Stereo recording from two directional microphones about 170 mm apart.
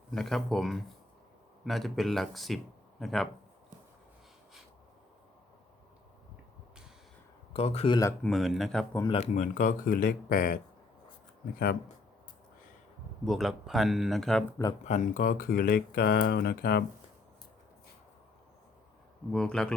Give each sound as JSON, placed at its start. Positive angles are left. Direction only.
{"t": 0.1, "sound": "speech", "side_deg": 0}
{"t": 7.5, "sound": "speech", "side_deg": 40}
{"t": 8.2, "sound": "speech", "side_deg": 0}
{"t": 9.1, "sound": "speech", "side_deg": 45}
{"t": 13.2, "sound": "speech", "side_deg": 0}
{"t": 14.8, "sound": "speech", "side_deg": 45}
{"t": 19.3, "sound": "speech", "side_deg": 5}